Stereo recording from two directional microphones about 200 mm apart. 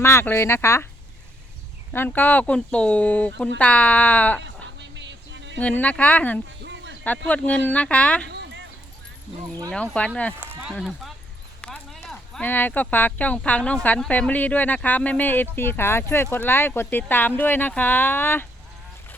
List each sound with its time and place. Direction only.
0.0 s speech: 15° left (ahead or behind)
1.9 s speech: 10° left (ahead or behind)
4.4 s a sound: 60° right (ahead or behind)
5.5 s speech: 5° left (ahead or behind)
6.6 s a sound: 60° right (ahead or behind)
7.3 s speech: 5° left (ahead or behind)
8.3 s a sound: 60° right (ahead or behind)
9.7 s speech: 5° left (ahead or behind)
10.4 s speech: 10° right (ahead or behind); by 18.4 s 10° left (ahead or behind)